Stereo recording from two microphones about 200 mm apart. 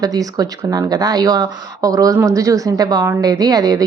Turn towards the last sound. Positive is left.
turn(degrees=-20)  # may be behind; listen again after turning